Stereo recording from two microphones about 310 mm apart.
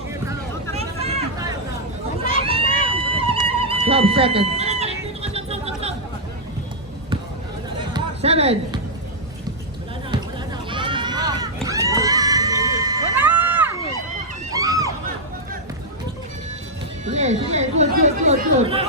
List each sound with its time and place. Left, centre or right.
0.3 s vehicle: centre
2.3 s run: centre
2.8 s music: centre
7.9 s music: centre
10.7 s a sound: centre
14.5 s music: centre
17.1 s speech: right